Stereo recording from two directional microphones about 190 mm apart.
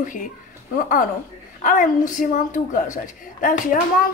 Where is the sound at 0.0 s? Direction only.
45° left (ahead or behind).